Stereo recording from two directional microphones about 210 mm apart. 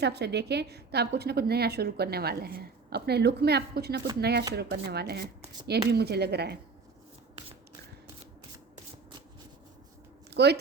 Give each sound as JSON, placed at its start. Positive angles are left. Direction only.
{"t": 0.0, "sound": "a woman's voice", "side_deg": -50}
{"t": 10.2, "sound": "speech", "side_deg": -50}